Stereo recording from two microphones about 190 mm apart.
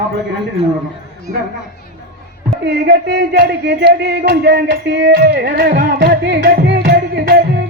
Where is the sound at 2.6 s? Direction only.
55° right (ahead or behind).